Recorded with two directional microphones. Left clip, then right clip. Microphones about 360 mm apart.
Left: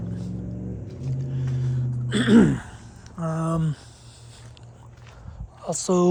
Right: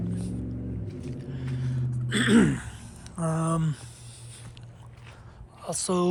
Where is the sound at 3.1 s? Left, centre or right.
Centre.